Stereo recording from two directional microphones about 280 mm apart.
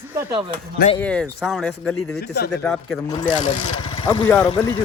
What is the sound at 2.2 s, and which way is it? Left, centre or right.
Speech, left.